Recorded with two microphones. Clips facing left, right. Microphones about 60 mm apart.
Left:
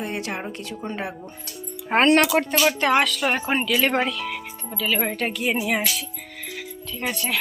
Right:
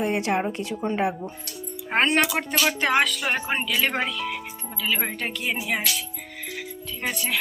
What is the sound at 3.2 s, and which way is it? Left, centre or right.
Speech, centre.